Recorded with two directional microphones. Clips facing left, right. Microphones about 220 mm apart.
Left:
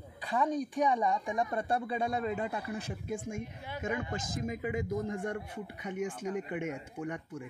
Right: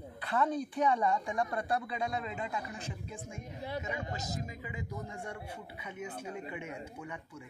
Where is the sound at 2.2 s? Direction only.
55° left (ahead or behind).